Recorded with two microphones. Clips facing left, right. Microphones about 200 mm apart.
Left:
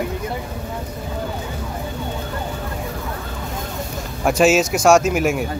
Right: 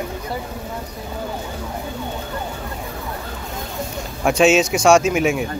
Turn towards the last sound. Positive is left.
turn(degrees=5)  # may be behind; listen again after turning